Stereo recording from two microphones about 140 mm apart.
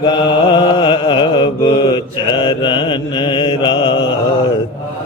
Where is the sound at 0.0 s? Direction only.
35° left (ahead or behind).